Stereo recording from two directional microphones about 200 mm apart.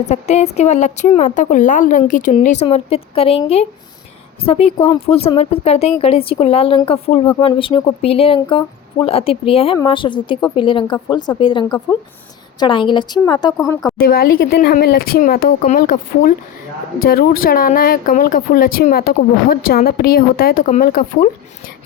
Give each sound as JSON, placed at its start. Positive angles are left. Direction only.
{"t": 0.1, "sound": "a woman's voice", "side_deg": 35}
{"t": 14.0, "sound": "speech", "side_deg": 50}